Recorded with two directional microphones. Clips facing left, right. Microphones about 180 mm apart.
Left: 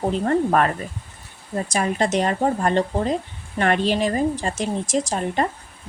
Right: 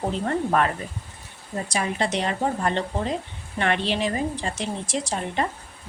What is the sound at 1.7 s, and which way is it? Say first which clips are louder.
A woman's voice: left 4 dB; 45° left (ahead or behind).